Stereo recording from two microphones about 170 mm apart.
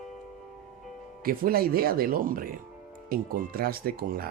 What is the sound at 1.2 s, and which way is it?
Speech, 60° right (ahead or behind).